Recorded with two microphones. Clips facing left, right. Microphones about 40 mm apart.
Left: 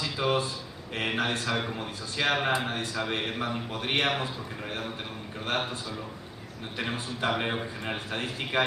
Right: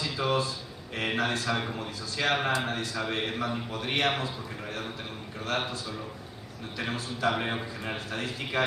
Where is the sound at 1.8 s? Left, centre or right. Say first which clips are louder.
Left 1 dB; left.